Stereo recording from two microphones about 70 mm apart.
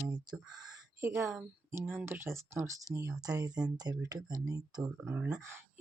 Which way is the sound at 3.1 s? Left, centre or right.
Right.